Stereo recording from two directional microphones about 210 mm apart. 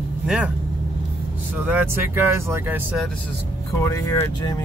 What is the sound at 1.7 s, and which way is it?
Speech, 10° right (ahead or behind).